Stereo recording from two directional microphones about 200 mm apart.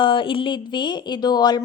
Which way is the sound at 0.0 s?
25° left (ahead or behind).